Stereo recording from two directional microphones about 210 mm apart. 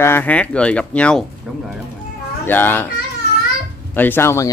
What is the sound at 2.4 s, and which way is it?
Speech, 10° left (ahead or behind).